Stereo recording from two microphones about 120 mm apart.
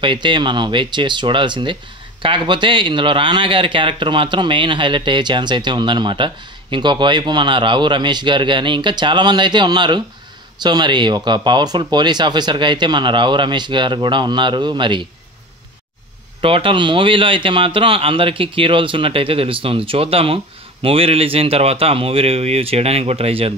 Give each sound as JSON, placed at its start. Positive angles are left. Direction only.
{"t": 0.0, "sound": "speech", "side_deg": -40}
{"t": 16.3, "sound": "a man's voice", "side_deg": -45}